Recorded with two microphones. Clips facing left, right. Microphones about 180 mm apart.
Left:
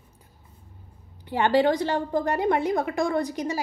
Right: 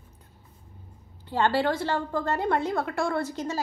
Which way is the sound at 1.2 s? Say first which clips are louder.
Left 3 dB; 15° left (ahead or behind).